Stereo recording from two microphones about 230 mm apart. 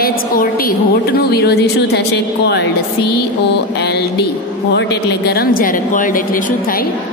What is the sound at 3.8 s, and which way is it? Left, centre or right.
A woman's voice, left.